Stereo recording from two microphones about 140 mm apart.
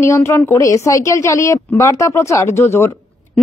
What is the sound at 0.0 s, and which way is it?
Speech, 20° left (ahead or behind).